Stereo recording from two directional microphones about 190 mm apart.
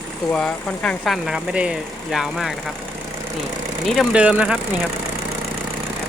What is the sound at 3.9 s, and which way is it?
Speech, 5° right (ahead or behind).